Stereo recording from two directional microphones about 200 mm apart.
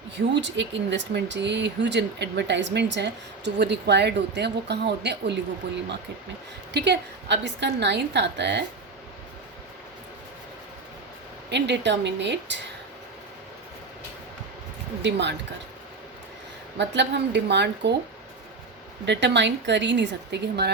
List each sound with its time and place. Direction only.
0.4 s speech: 65° right (ahead or behind)
6.7 s speech: 55° right (ahead or behind)
11.4 s speech: 60° right (ahead or behind)
15.0 s speech: 60° right (ahead or behind)
16.7 s speech: 60° right (ahead or behind)
19.0 s speech: 60° right (ahead or behind)